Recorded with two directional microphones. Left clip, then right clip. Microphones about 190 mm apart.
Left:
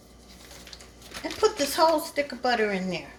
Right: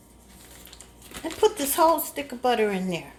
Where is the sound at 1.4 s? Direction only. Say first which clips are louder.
Right 2 dB; 35° right (ahead or behind).